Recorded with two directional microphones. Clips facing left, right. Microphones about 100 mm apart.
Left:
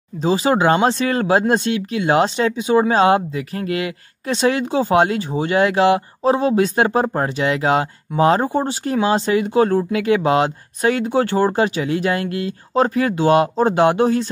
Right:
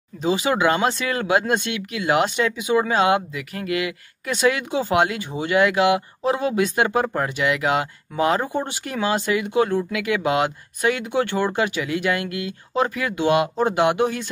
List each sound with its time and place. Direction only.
0.2 s speech: 35° left (ahead or behind)